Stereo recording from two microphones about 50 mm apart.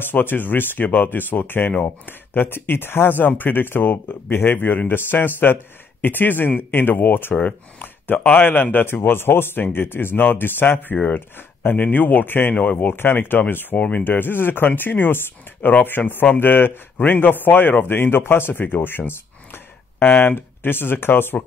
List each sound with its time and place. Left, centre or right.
0.0 s speech: left
13.7 s speech: left
14.0 s speech: left